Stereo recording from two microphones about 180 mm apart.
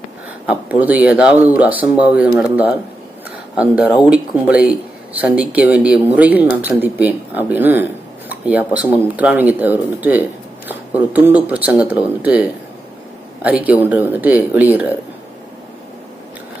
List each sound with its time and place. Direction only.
0.4 s speech: 10° right (ahead or behind)